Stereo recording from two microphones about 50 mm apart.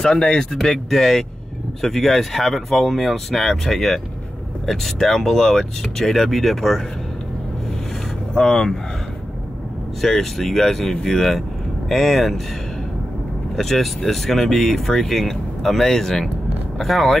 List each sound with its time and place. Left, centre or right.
0.0 s speech: centre
0.6 s speech: centre
8.4 s speech: centre
10.0 s speech: centre
13.6 s speech: centre